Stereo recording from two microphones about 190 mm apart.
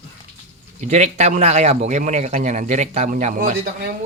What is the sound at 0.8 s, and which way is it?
A man's voice, 35° right (ahead or behind).